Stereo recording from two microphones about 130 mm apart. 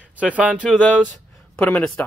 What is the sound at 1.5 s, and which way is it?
Speech, 10° left (ahead or behind).